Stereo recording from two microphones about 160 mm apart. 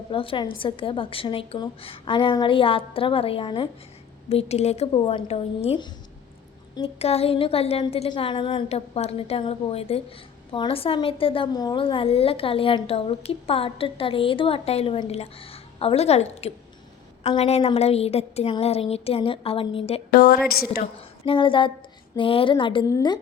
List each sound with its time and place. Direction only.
0.1 s a woman's voice: 35° left (ahead or behind)
20.1 s a woman's voice: 65° left (ahead or behind)
21.2 s a woman's voice: 30° left (ahead or behind)